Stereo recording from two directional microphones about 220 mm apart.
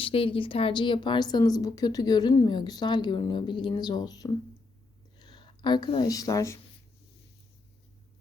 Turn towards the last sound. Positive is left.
turn(degrees=15)  # may be behind; listen again after turning